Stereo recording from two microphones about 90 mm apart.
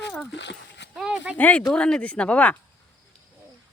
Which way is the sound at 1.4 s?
15° left (ahead or behind).